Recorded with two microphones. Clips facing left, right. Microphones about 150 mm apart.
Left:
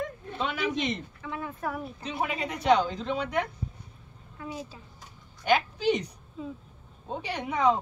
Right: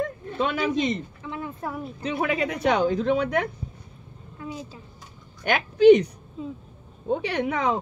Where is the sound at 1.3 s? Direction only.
25° right (ahead or behind).